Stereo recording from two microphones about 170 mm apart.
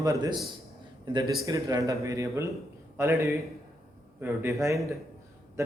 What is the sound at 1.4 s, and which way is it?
A man's voice, 20° right (ahead or behind).